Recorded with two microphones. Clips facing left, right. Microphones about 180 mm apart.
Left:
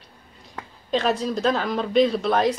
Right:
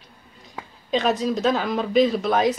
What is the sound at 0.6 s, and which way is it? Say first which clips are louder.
Speech: even; centre (ahead or behind).